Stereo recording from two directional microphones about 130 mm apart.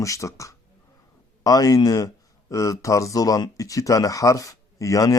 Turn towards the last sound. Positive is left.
turn(degrees=25)  # may be behind; listen again after turning